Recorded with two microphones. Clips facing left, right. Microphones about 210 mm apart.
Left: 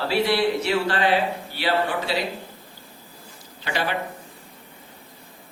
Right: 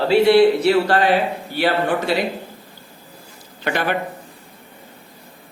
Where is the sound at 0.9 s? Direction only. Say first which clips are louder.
Right 4 dB; 45° right (ahead or behind).